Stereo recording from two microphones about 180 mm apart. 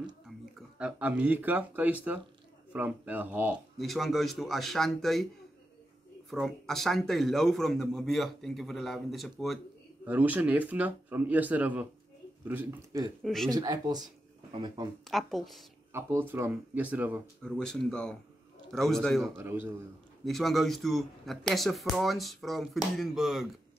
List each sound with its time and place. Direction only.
0.6 s speech: 5° right (ahead or behind)
6.3 s speech: centre (ahead or behind); by 13.1 s 15° right (ahead or behind)
13.2 s speech: centre (ahead or behind)
13.5 s speech: 20° right (ahead or behind)
15.0 s speech: centre (ahead or behind)
15.9 s speech: 15° right (ahead or behind)
17.4 s speech: 5° left (ahead or behind)
19.3 s speech: 10° right (ahead or behind)
20.2 s speech: centre (ahead or behind)